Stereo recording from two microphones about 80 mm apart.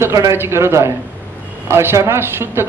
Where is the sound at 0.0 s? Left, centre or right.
Right.